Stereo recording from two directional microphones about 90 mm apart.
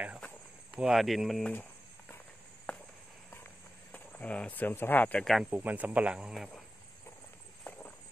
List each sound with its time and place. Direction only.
0.7 s speech: 5° right (ahead or behind)
1.5 s cricket: 20° left (ahead or behind)
3.9 s speech: 15° left (ahead or behind)
5.2 s speech: centre (ahead or behind)
5.5 s speech: 20° right (ahead or behind); by 6.6 s 5° right (ahead or behind)